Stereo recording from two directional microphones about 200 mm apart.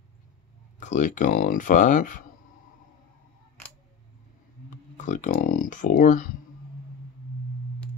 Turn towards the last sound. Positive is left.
turn(degrees=40)  # may be behind; listen again after turning